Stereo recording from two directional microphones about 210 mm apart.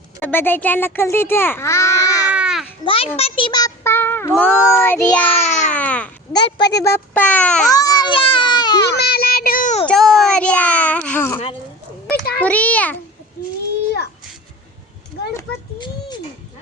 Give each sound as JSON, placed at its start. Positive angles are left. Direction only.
{"t": 0.2, "sound": "a child's voice", "side_deg": 10}
{"t": 2.3, "sound": "babbling", "side_deg": -5}
{"t": 2.8, "sound": "a child's voice", "side_deg": 25}
{"t": 5.3, "sound": "a child's voice", "side_deg": 35}
{"t": 5.7, "sound": "speech", "side_deg": 5}
{"t": 6.3, "sound": "a child's voice", "side_deg": 20}
{"t": 7.7, "sound": "baby cry", "side_deg": 15}
{"t": 8.9, "sound": "child singing", "side_deg": 50}
{"t": 9.8, "sound": "a child's voice", "side_deg": 0}
{"t": 12.4, "sound": "a child's voice", "side_deg": 5}
{"t": 15.4, "sound": "a sound", "side_deg": 20}